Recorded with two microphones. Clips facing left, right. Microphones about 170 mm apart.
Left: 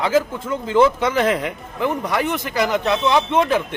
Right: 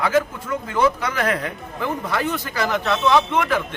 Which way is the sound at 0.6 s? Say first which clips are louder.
Left 5 dB; 25° left (ahead or behind).